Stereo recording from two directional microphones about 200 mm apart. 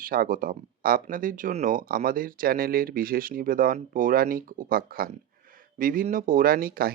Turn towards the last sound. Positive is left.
turn(degrees=-50)  # may be behind; listen again after turning